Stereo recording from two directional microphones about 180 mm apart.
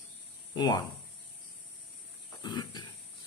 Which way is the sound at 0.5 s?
20° left (ahead or behind).